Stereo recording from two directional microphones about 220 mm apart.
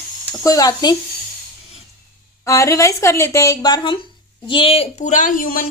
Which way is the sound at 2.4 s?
15° left (ahead or behind).